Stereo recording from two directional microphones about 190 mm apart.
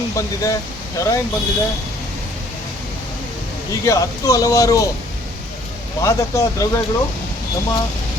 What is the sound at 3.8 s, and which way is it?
Speech, 15° left (ahead or behind).